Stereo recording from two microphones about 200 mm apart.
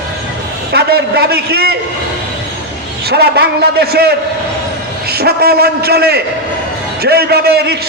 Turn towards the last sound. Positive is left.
turn(degrees=-55)  # may be behind; listen again after turning